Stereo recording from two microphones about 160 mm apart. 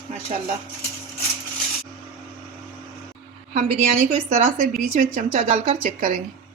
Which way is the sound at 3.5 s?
50° right (ahead or behind).